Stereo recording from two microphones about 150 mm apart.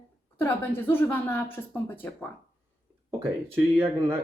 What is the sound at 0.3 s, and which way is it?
A woman's voice, 15° left (ahead or behind).